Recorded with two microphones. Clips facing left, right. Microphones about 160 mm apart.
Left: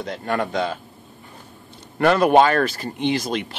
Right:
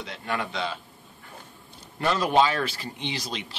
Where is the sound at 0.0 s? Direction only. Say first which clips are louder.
Left 7 dB; 45° left (ahead or behind).